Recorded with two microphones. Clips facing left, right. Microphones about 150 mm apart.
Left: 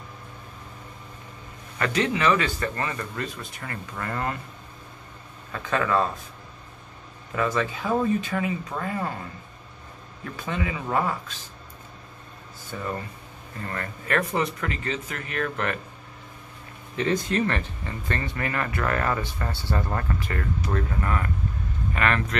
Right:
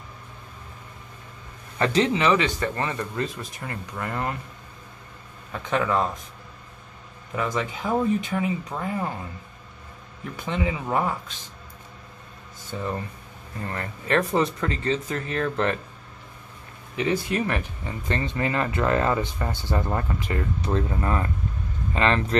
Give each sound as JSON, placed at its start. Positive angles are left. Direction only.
{"t": 1.8, "sound": "speech", "side_deg": -30}
{"t": 5.5, "sound": "speech", "side_deg": -15}
{"t": 7.3, "sound": "speech", "side_deg": -15}
{"t": 10.3, "sound": "speech", "side_deg": -20}
{"t": 12.7, "sound": "speech", "side_deg": -15}
{"t": 13.7, "sound": "speech", "side_deg": -25}
{"t": 16.9, "sound": "speech", "side_deg": -15}